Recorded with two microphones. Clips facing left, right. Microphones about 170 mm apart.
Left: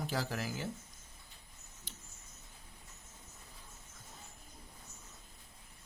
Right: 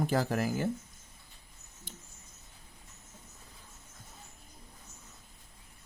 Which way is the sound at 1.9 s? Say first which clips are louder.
Right 6 dB; 50° right (ahead or behind).